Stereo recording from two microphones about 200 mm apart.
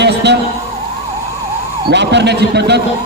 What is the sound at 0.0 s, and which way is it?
Emergency vehicle, 60° right (ahead or behind).